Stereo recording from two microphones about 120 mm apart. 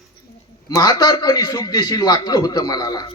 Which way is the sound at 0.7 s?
35° left (ahead or behind).